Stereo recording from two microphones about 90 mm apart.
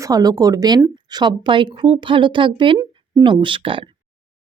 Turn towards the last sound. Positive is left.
turn(degrees=-75)  # may be behind; listen again after turning